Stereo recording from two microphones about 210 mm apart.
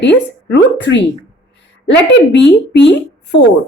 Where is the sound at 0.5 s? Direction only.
55° left (ahead or behind).